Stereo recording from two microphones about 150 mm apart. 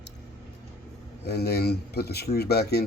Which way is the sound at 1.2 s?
90° left.